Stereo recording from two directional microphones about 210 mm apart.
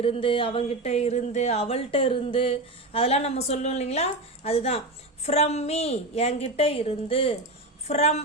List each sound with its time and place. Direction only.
0.0 s a woman's voice: 25° left (ahead or behind)